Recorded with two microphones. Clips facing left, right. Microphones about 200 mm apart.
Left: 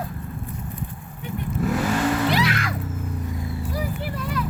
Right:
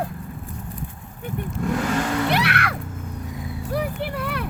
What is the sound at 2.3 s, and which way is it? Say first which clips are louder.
Music: even; 65° right (ahead or behind).